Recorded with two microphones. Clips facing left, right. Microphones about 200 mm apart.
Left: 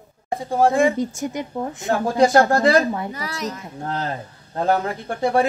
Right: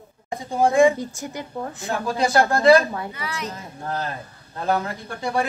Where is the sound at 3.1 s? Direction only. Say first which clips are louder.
Left 3 dB; 40° left (ahead or behind).